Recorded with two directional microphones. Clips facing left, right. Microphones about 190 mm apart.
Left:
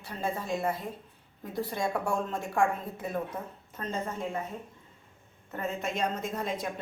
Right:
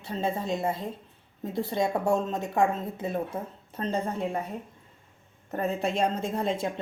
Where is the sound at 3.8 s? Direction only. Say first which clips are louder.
Right 5 dB; 35° right (ahead or behind).